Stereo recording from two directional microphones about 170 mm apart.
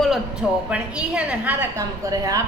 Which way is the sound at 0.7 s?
5° right (ahead or behind).